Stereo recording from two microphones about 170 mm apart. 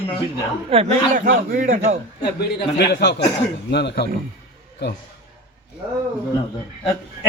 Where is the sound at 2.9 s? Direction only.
85° left.